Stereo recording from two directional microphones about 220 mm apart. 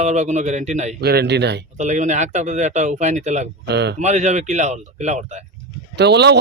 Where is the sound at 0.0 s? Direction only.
30° right (ahead or behind).